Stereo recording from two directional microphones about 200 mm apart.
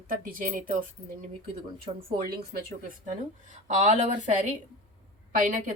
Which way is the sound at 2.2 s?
45° right (ahead or behind).